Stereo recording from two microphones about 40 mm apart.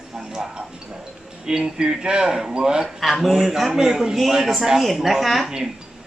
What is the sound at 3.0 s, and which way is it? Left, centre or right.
A man's voice, centre.